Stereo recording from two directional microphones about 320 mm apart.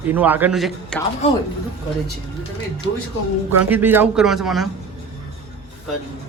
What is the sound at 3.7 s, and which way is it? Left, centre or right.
Speech, centre.